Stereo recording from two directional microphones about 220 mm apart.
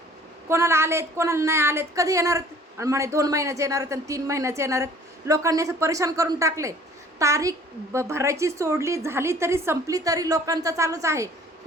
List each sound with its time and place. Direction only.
0.4 s a woman's voice: 10° right (ahead or behind)